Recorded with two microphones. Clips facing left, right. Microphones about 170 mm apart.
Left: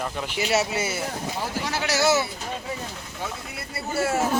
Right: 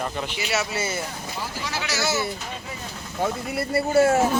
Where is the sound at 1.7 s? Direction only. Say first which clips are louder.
Left 5 dB; 55° left (ahead or behind).